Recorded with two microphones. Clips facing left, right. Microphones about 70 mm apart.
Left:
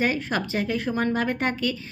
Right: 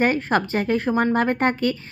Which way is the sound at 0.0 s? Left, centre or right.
Right.